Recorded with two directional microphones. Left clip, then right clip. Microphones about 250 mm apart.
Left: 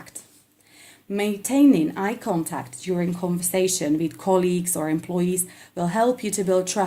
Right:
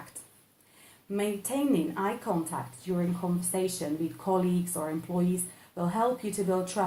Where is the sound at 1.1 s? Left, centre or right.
Left.